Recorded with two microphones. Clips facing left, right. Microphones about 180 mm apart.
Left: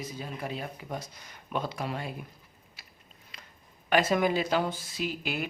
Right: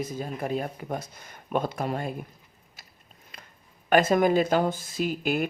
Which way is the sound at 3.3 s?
50° right (ahead or behind).